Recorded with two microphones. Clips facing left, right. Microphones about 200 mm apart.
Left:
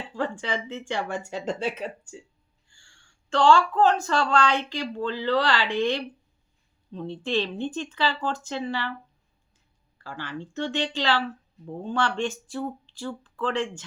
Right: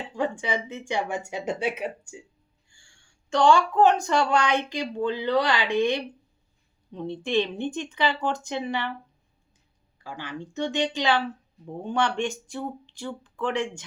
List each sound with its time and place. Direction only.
0.1 s speech: 15° right (ahead or behind)
2.8 s a sound: 15° right (ahead or behind)
4.0 s speech: 15° right (ahead or behind)
10.0 s speech: 15° right (ahead or behind)